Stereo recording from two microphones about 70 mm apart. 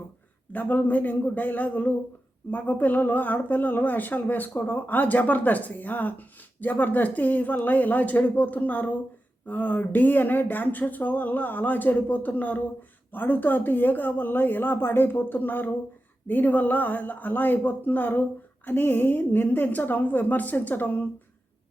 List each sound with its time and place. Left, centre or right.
0.5 s speech: left